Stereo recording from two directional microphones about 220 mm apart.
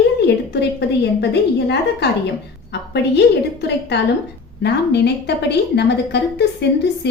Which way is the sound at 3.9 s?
50° left (ahead or behind).